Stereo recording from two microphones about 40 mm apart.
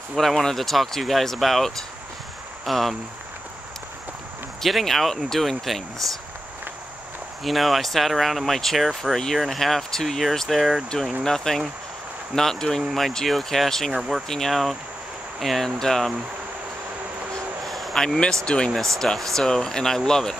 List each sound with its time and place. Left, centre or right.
0.1 s speech: centre
0.4 s speech: centre
4.6 s speech: centre
7.4 s speech: centre
14.5 s speech: centre
17.6 s a sound: centre
17.9 s speech: centre
18.2 s speech: left
19.1 s speech: centre
19.4 s speech: centre